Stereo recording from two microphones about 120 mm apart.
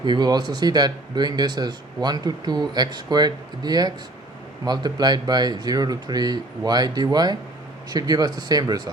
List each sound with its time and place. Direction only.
0.0 s speech: 40° right (ahead or behind)